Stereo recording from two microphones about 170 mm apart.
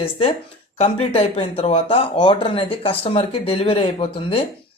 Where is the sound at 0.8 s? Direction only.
35° left (ahead or behind).